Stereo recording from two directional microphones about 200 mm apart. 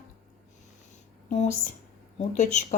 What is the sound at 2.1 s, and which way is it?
Speech, 35° left (ahead or behind).